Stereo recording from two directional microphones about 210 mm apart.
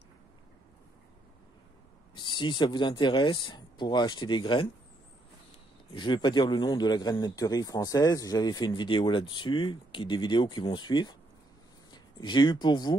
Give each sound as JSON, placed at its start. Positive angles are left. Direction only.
{"t": 2.1, "sound": "a man's voice", "side_deg": 20}
{"t": 5.9, "sound": "a man's voice", "side_deg": 20}